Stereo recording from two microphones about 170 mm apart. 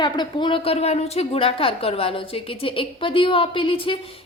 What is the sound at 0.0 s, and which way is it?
A woman's voice, 25° left (ahead or behind).